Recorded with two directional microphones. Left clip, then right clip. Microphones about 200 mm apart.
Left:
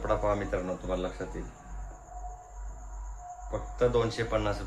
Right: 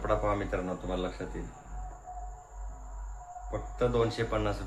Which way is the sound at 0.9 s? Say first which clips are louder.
Left 2 dB; 20° right (ahead or behind).